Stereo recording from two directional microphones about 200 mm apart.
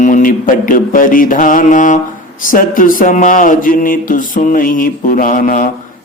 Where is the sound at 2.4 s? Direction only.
45° left (ahead or behind).